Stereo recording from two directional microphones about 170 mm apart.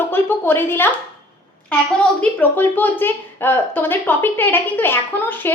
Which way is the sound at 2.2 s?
10° left (ahead or behind).